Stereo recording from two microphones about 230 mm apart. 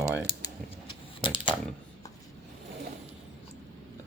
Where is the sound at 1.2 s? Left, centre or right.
Left.